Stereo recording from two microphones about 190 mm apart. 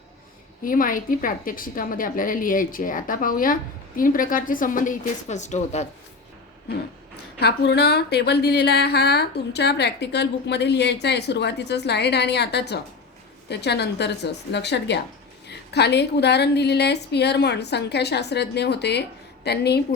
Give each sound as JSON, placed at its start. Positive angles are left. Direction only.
{"t": 0.6, "sound": "a woman's voice", "side_deg": 45}
{"t": 7.3, "sound": "a woman's voice", "side_deg": 60}